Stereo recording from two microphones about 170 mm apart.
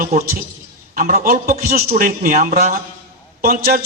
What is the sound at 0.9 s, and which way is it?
Speech, 50° right (ahead or behind).